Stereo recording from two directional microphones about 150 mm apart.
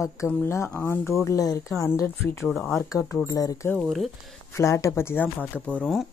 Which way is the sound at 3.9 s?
Centre (ahead or behind).